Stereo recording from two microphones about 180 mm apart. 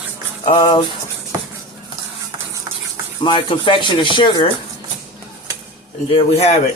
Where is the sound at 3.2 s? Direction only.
30° left (ahead or behind).